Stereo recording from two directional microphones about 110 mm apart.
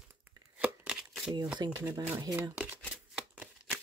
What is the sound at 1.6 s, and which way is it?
Speech, 40° right (ahead or behind).